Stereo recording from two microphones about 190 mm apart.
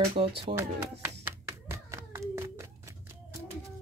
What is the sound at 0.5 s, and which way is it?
Clapping, 15° right (ahead or behind).